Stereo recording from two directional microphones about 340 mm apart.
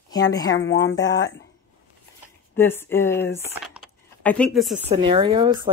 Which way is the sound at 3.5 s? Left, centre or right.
Centre.